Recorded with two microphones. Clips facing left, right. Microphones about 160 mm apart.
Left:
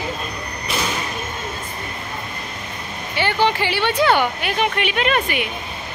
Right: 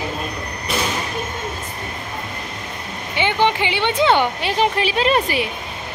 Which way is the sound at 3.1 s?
20° right (ahead or behind).